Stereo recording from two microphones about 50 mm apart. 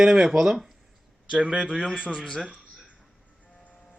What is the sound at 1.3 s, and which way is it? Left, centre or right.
Speech, right.